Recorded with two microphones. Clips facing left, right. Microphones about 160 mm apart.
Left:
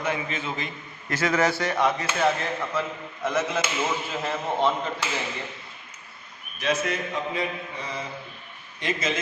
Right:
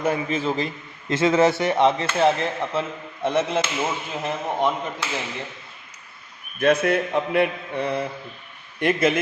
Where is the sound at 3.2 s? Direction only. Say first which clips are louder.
Right 4 dB; 30° right (ahead or behind).